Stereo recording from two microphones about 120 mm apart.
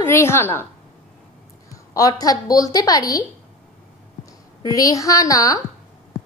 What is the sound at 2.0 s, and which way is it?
A woman's voice, 30° left (ahead or behind).